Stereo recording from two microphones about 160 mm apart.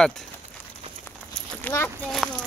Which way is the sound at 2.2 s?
Centre (ahead or behind).